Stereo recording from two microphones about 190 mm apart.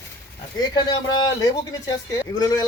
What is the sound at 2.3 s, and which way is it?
Speech, 20° left (ahead or behind).